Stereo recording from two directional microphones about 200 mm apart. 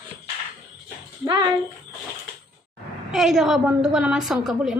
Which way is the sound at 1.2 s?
20° right (ahead or behind).